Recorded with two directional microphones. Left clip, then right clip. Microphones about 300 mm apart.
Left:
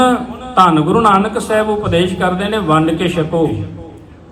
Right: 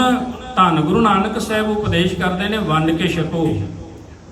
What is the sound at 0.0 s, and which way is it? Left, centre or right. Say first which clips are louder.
A man's voice: left 4 dB; centre.